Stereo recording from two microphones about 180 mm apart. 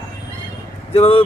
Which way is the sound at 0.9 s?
35° left (ahead or behind).